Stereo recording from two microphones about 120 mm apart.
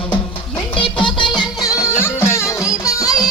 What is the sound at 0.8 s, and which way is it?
Music, 45° left (ahead or behind).